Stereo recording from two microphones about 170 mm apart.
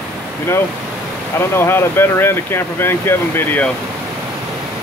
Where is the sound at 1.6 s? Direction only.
15° left (ahead or behind).